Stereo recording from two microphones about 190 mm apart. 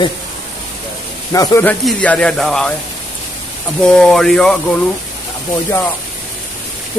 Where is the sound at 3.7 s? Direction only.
5° left (ahead or behind).